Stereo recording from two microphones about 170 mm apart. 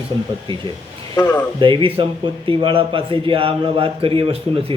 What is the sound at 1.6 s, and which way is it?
A man's voice, 30° right (ahead or behind).